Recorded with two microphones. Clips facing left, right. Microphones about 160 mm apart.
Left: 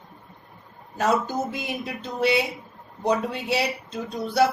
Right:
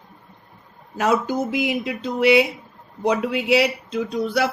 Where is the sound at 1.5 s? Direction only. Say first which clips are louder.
Right 8 dB; 90° right.